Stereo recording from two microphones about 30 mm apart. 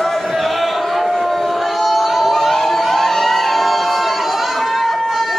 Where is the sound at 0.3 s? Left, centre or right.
Centre.